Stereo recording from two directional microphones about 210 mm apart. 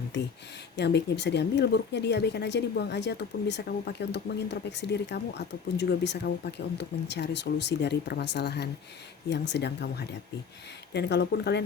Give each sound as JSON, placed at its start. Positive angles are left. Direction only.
{"t": 0.1, "sound": "speech", "side_deg": 55}